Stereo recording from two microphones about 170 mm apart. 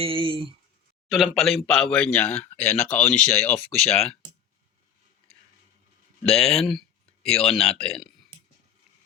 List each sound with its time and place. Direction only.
0.0 s speech: 30° right (ahead or behind)
1.0 s speech: centre (ahead or behind)
6.2 s speech: 5° left (ahead or behind)